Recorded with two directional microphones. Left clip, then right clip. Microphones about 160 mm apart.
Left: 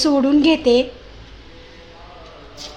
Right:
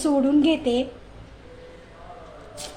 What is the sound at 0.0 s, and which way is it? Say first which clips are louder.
Speech: left 5 dB; 25° left (ahead or behind).